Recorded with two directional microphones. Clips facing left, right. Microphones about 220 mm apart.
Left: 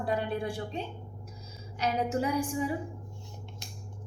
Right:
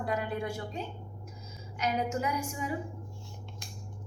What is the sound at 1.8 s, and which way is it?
Speech, 30° left (ahead or behind).